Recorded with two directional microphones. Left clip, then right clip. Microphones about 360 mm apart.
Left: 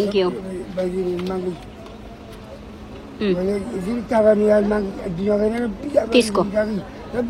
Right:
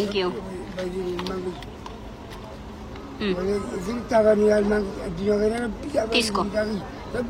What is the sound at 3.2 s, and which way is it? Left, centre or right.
Speech, centre.